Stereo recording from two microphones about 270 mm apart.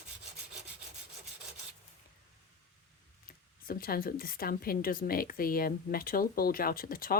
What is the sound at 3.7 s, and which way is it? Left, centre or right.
A woman's voice, left.